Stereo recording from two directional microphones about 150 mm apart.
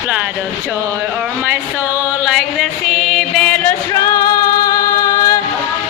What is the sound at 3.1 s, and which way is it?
Music, 5° left (ahead or behind).